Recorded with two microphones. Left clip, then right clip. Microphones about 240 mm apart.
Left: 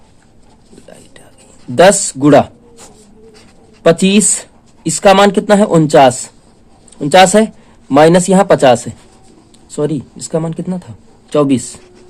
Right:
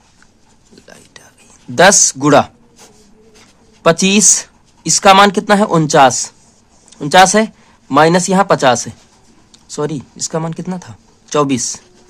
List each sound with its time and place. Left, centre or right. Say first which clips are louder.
1.7 s speech: left 1 dB; right
3.8 s speech: even; centre